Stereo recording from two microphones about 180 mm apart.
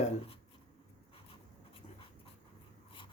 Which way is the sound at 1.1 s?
30° left (ahead or behind).